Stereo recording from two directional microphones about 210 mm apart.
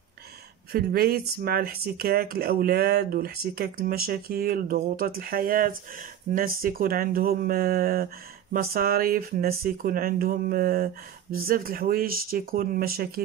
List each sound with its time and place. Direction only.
0.7 s speech: 45° right (ahead or behind)